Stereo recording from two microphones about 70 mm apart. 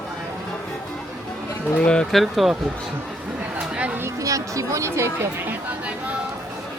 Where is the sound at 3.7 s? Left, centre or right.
Centre.